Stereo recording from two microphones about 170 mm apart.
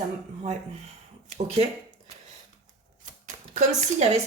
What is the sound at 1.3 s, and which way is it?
Speech, 40° right (ahead or behind).